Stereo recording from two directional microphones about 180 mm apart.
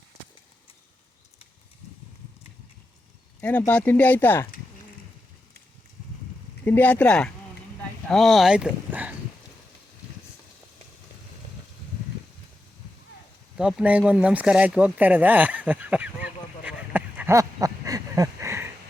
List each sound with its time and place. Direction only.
3.7 s speech: 10° left (ahead or behind)
6.7 s speech: 10° left (ahead or behind); by 9.1 s 10° right (ahead or behind)
13.6 s a sound: 5° right (ahead or behind)